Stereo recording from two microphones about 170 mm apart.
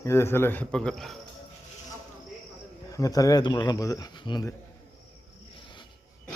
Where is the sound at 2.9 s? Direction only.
20° left (ahead or behind).